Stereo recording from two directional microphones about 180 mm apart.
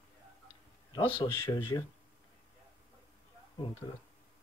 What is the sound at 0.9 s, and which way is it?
Speech, 25° left (ahead or behind).